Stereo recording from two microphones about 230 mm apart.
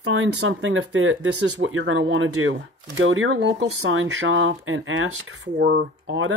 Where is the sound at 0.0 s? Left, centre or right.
Right.